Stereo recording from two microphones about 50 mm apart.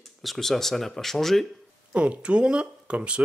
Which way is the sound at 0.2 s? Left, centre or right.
Centre.